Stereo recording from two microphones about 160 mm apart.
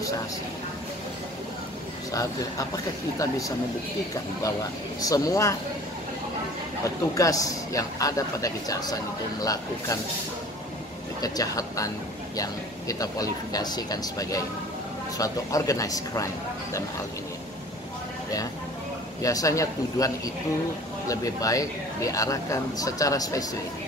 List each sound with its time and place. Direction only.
2.1 s speech: 20° left (ahead or behind)
5.0 s speech: 20° left (ahead or behind)
6.8 s speech: 20° left (ahead or behind)
11.1 s speech: 25° left (ahead or behind)
19.2 s speech: 20° left (ahead or behind)
21.1 s speech: 20° left (ahead or behind)